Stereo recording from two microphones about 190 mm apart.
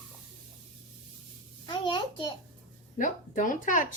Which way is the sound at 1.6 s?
25° left (ahead or behind).